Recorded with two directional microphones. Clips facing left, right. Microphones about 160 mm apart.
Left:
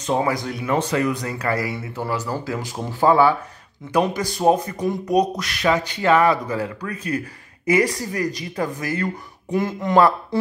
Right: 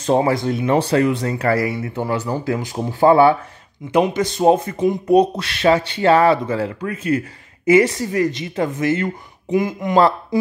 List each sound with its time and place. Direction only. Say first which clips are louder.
0.0 s a woman's voice: right 5 dB; 30° right (ahead or behind); by 9.9 s 15° right (ahead or behind)